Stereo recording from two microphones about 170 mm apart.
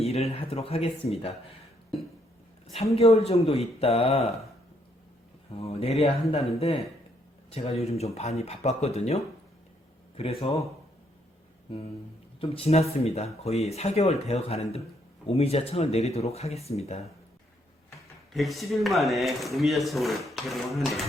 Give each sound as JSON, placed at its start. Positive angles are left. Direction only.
{"t": 0.0, "sound": "speech", "side_deg": 35}
{"t": 2.7, "sound": "speech", "side_deg": 35}
{"t": 5.5, "sound": "speech", "side_deg": 35}
{"t": 12.4, "sound": "speech", "side_deg": 35}
{"t": 18.3, "sound": "speech", "side_deg": 0}